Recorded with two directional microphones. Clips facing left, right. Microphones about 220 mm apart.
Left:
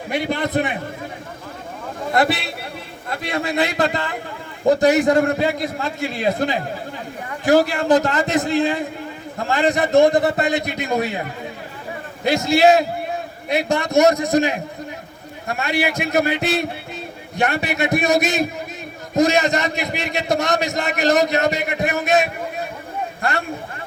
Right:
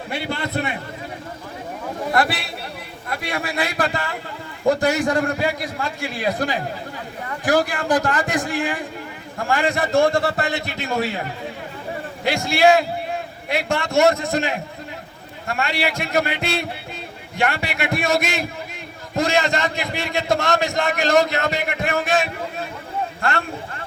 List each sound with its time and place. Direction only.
0.1 s a man's voice: 15° left (ahead or behind)
2.1 s a man's voice: 20° left (ahead or behind)
12.2 s a man's voice: 20° left (ahead or behind)